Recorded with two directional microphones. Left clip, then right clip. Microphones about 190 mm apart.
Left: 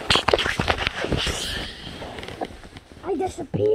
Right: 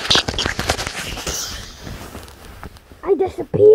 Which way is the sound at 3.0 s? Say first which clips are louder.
Right 8 dB; 65° right (ahead or behind).